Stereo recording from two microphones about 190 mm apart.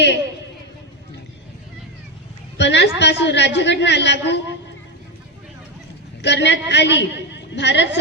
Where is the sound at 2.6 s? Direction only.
65° left (ahead or behind).